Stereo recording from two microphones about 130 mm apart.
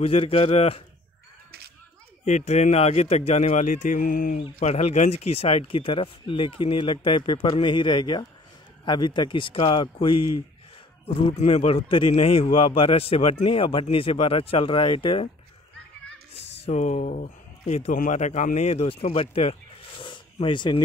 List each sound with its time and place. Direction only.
0.0 s speech: 45° left (ahead or behind)
2.2 s speech: 60° left (ahead or behind); by 15.2 s 40° left (ahead or behind)
16.3 s speech: 55° left (ahead or behind)
20.0 s a sound: 40° left (ahead or behind)